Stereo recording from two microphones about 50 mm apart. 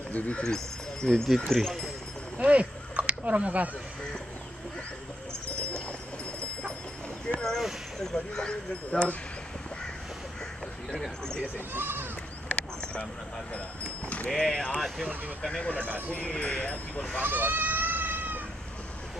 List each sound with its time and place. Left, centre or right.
0.1 s speech: centre
1.1 s speech: centre
2.3 s speech: right
7.3 s speech: centre
11.7 s speech: right
12.5 s clip-clop: left
13.8 s clip-clop: left
14.3 s speech: centre
15.9 s speech: left
17.2 s goat: right